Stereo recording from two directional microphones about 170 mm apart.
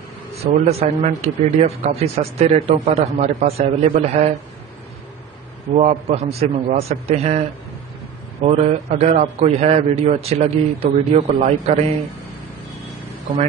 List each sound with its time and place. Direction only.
0.3 s a man's voice: 35° right (ahead or behind)
5.7 s a man's voice: 45° right (ahead or behind)